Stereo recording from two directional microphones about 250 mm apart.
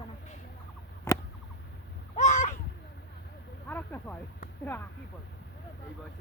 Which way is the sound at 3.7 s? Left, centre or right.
Centre.